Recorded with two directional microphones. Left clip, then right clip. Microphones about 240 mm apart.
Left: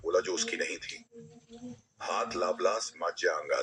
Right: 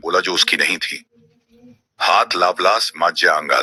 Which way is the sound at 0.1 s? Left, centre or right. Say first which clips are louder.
Right 14 dB; right.